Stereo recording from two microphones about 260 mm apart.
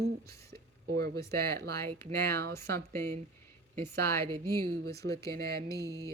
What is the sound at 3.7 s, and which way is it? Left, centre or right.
A woman's voice, right.